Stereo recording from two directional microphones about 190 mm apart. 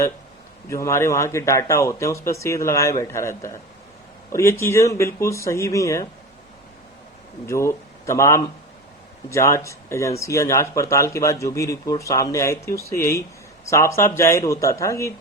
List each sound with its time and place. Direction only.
0.7 s speech: 15° left (ahead or behind)
7.4 s speech: 15° left (ahead or behind)